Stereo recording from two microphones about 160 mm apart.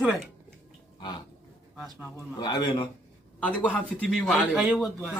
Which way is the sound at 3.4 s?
10° left (ahead or behind).